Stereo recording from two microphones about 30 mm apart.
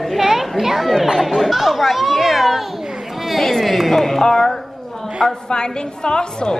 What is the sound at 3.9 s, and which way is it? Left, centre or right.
Carnatic music, centre.